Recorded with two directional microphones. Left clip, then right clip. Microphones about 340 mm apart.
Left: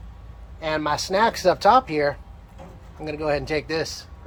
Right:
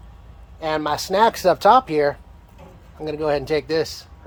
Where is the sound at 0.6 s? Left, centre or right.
Right.